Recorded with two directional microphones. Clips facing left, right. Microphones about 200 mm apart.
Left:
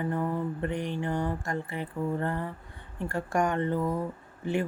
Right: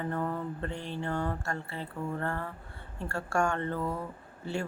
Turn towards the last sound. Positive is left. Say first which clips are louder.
# left 5 dB
turn(degrees=15)  # may be behind; listen again after turning